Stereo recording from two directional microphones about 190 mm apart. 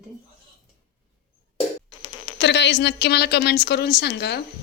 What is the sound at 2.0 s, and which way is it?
Speech, 65° left (ahead or behind).